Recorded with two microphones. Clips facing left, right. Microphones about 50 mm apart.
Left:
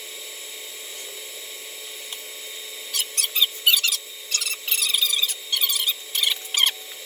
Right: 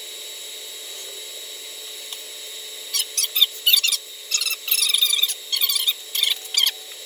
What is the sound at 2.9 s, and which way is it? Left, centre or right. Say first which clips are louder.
Squeak: even; left.